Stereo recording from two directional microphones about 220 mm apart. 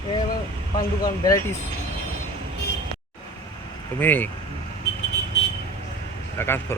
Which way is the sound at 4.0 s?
10° left (ahead or behind).